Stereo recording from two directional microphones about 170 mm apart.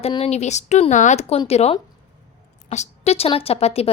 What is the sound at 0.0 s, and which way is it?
A woman's voice, 35° left (ahead or behind).